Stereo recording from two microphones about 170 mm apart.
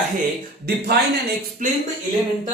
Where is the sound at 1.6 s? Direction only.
50° right (ahead or behind).